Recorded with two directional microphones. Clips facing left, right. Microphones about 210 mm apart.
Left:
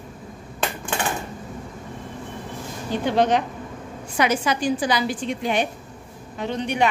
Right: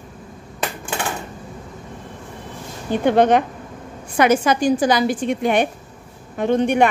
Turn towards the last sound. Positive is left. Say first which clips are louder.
# right 7 dB
turn(degrees=-50)  # may be behind; listen again after turning